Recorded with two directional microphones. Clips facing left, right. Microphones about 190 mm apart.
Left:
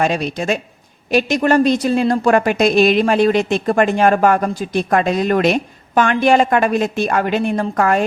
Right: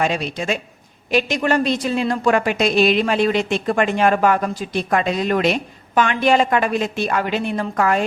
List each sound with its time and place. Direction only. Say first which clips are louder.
0.0 s a woman's voice: left 3 dB; 45° left (ahead or behind)